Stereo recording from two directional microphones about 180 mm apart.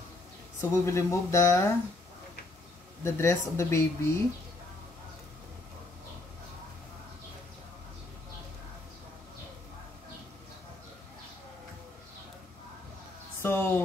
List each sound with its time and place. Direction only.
0.6 s speech: 15° left (ahead or behind)
3.0 s speech: 15° left (ahead or behind)
13.4 s speech: 10° left (ahead or behind)